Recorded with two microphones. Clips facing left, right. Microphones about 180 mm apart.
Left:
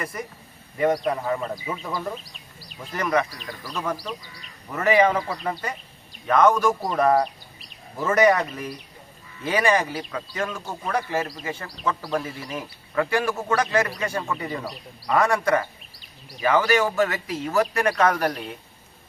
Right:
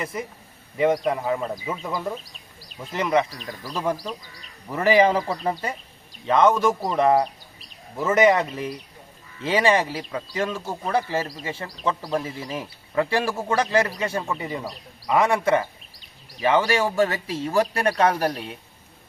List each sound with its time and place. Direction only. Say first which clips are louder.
0.0 s speech: right 2 dB; 25° right (ahead or behind)
1.6 s speech: right 1 dB; 5° right (ahead or behind)
2.9 s speech: right 2 dB; 25° right (ahead or behind)